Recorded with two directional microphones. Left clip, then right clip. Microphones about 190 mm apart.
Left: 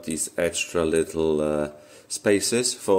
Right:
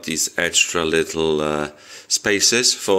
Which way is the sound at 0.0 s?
5° left (ahead or behind).